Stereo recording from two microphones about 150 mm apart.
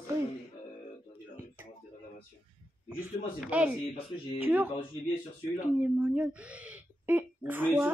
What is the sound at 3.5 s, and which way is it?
Speech, 10° right (ahead or behind).